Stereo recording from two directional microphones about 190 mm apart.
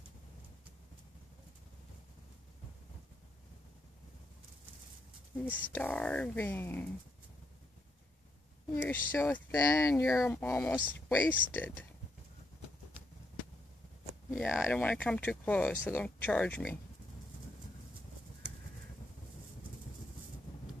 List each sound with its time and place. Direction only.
5.4 s speech: 10° left (ahead or behind)
8.8 s speech: 10° left (ahead or behind)
14.3 s speech: centre (ahead or behind)